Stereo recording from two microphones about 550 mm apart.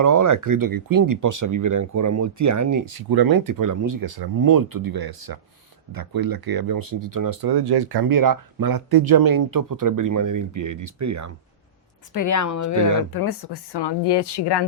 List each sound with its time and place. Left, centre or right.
0.0 s speech: right
12.1 s a woman's voice: left
13.1 s speech: left